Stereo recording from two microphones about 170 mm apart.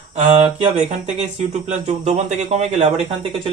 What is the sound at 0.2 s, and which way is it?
Speech, 40° right (ahead or behind).